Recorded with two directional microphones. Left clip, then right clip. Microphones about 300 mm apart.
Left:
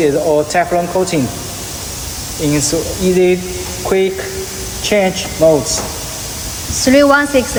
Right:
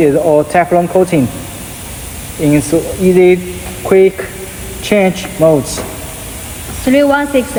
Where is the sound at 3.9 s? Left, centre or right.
Right.